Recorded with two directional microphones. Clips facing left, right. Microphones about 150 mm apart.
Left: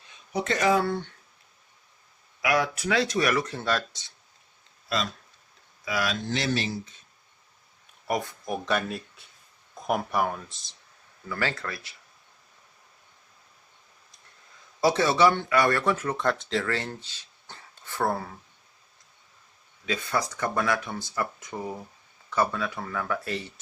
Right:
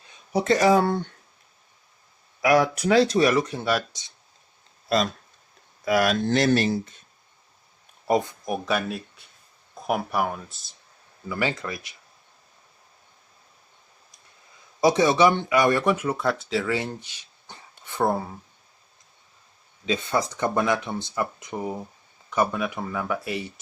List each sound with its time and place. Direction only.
0.3 s speech: 35° right (ahead or behind)
2.4 s speech: 40° right (ahead or behind); by 4.1 s 10° right (ahead or behind)
4.9 s speech: 40° right (ahead or behind)
5.8 s speech: 55° right (ahead or behind)
8.0 s speech: 25° right (ahead or behind)
8.4 s speech: 10° right (ahead or behind)
11.3 s speech: 15° right (ahead or behind)
14.8 s speech: 15° right (ahead or behind)
19.8 s speech: 20° right (ahead or behind)